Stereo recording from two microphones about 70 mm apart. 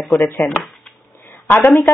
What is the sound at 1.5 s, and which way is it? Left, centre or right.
Speech, left.